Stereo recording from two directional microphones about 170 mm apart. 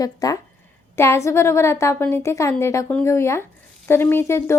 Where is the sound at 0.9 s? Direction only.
15° left (ahead or behind).